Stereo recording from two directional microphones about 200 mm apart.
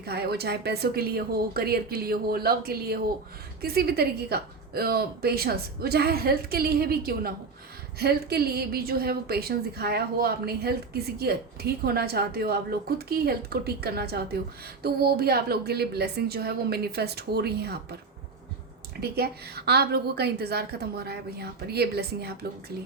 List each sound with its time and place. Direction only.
0.0 s a woman's voice: 55° right (ahead or behind)
18.9 s a woman's voice: 50° right (ahead or behind)